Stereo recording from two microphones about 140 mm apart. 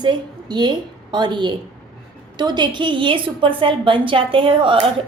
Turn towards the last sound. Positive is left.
turn(degrees=-35)  # may be behind; listen again after turning